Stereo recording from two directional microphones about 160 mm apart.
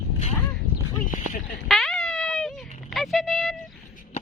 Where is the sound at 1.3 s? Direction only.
55° left (ahead or behind).